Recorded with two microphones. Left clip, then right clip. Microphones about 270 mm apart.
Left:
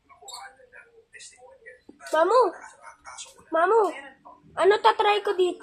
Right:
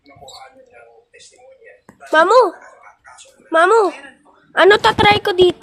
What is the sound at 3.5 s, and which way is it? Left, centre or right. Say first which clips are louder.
A woman's voice: right 9 dB; right.